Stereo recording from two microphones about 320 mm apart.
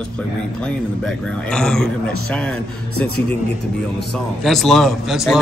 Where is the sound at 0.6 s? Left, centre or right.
Centre.